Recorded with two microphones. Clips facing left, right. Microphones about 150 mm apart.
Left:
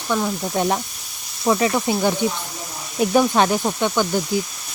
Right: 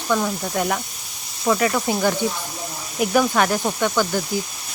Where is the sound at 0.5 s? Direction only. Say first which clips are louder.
Left 3 dB; 25° left (ahead or behind).